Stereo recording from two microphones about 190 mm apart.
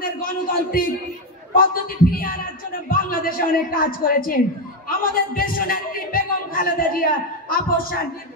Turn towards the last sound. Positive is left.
turn(degrees=50)  # may be behind; listen again after turning